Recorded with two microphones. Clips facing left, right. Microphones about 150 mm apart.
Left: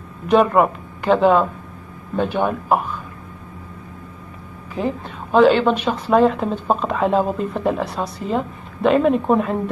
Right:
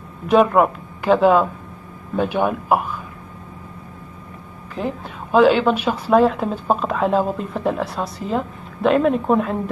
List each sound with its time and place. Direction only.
0.3 s speech: centre (ahead or behind)
4.7 s speech: centre (ahead or behind)